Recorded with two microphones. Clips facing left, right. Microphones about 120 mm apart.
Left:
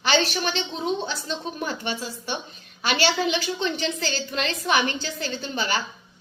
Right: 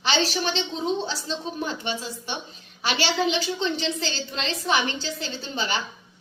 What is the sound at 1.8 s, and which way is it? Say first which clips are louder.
A woman's voice: even; 45° left (ahead or behind).